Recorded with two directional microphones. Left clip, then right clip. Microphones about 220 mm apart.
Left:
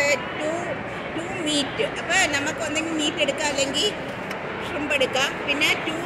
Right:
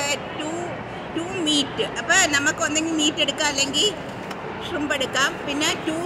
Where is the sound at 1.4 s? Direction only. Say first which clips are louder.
Right 2 dB; 40° right (ahead or behind).